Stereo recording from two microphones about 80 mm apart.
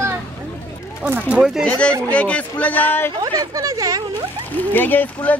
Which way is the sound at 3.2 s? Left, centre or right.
Right.